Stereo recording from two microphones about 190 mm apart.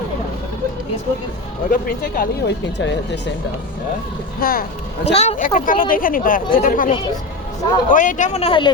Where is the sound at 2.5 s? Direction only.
65° left (ahead or behind).